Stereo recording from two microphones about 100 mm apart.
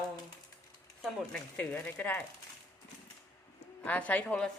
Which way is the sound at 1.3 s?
10° left (ahead or behind).